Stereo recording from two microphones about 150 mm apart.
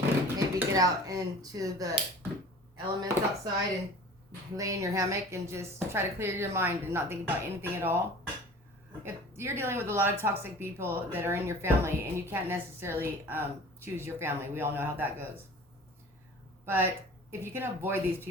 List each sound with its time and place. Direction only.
0.3 s speech: 25° right (ahead or behind)
4.5 s speech: 20° right (ahead or behind)
9.0 s speech: 15° right (ahead or behind)
16.6 s speech: 15° right (ahead or behind)